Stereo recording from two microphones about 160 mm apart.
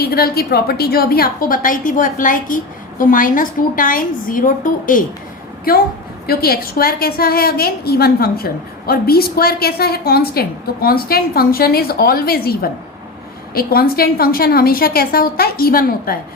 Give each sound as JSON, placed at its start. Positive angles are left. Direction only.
{"t": 0.0, "sound": "a woman's voice", "side_deg": 75}
{"t": 6.2, "sound": "a woman's voice", "side_deg": 70}